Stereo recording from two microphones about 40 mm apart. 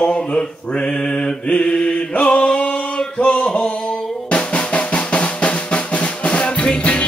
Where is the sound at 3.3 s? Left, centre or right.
Left.